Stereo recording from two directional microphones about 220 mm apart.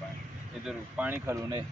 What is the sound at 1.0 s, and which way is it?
Speech, 10° right (ahead or behind).